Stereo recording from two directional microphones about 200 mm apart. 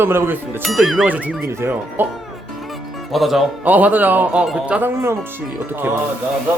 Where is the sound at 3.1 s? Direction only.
Centre (ahead or behind).